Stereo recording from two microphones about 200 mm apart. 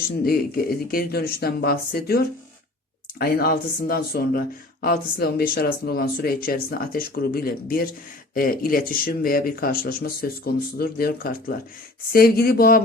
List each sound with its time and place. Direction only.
0.3 s speech: 45° left (ahead or behind)